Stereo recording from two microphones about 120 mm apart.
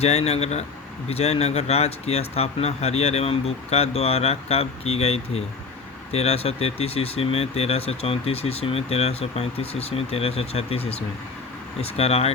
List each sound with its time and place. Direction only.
0.0 s speech: 65° left (ahead or behind)